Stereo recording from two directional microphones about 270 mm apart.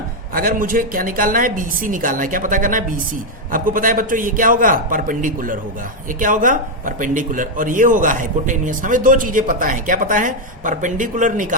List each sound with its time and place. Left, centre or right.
0.3 s a woman's voice: right